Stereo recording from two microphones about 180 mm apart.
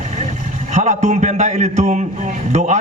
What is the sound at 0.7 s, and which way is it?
A man's voice, 40° right (ahead or behind).